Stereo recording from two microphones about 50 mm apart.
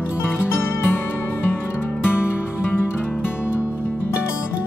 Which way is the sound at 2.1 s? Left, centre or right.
Left.